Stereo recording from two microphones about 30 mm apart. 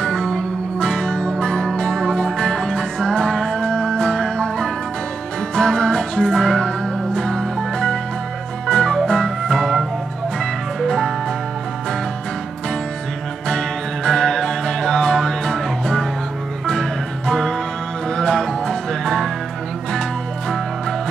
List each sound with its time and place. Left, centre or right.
0.0 s music: centre
3.7 s music: left
8.6 s organ: centre
9.5 s music: centre
13.5 s music: centre
17.3 s music: centre
19.9 s music: left